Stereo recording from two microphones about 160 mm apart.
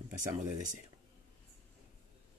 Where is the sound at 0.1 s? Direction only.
50° right (ahead or behind).